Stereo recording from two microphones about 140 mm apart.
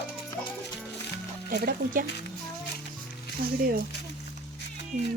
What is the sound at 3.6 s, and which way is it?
Speech, 90° right.